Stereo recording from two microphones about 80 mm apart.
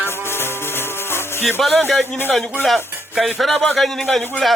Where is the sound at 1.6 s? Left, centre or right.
Centre.